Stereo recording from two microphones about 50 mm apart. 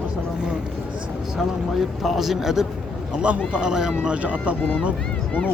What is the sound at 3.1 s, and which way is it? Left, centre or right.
Speech, right.